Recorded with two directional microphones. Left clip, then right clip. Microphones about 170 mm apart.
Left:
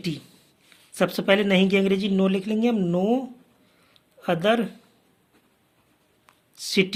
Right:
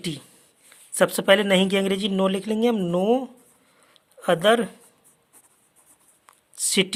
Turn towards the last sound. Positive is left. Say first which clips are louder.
# even
turn(degrees=-50)  # may be behind; listen again after turning